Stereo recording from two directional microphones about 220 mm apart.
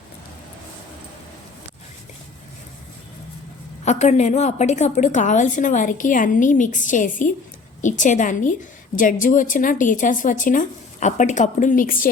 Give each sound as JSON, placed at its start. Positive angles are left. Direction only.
{"t": 3.8, "sound": "a woman's voice", "side_deg": 30}